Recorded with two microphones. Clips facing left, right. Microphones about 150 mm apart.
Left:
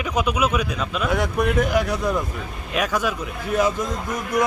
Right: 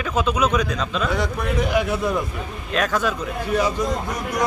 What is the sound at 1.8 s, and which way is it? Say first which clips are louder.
Speech: right 1 dB; 5° right (ahead or behind).